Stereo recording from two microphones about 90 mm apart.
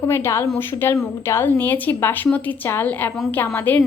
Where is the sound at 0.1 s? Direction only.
30° left (ahead or behind).